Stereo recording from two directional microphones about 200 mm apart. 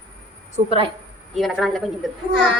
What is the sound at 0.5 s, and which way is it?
Speech, 25° right (ahead or behind).